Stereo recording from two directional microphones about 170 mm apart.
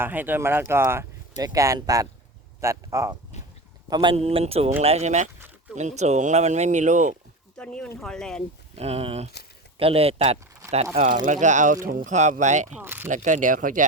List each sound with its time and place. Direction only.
0.0 s speech: 10° right (ahead or behind); by 7.2 s 45° right (ahead or behind)
7.6 s speech: 5° left (ahead or behind)
8.7 s speech: 35° right (ahead or behind)
10.9 s speech: 50° right (ahead or behind)
12.8 s speech: 10° right (ahead or behind)
13.1 s speech: 45° right (ahead or behind)